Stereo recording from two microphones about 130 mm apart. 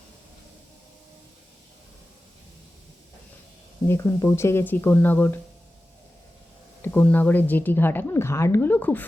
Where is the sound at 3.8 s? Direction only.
20° left (ahead or behind).